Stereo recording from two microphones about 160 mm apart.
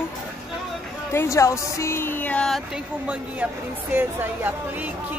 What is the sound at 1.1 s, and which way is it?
Speech, 20° left (ahead or behind).